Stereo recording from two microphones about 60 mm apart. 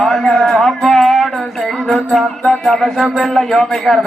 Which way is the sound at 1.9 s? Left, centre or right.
Centre.